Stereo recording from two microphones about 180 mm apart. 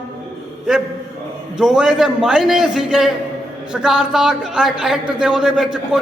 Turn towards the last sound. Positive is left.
turn(degrees=0)  # may be behind; listen again after turning